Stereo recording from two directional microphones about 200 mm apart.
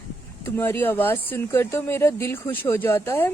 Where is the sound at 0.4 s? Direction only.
10° left (ahead or behind).